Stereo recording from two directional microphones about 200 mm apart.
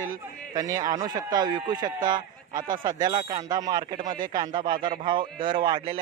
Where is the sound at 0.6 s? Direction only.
15° right (ahead or behind).